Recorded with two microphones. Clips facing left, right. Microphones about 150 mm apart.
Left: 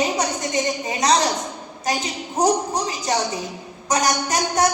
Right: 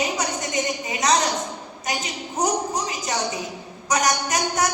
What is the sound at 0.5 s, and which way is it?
Speech, 35° left (ahead or behind).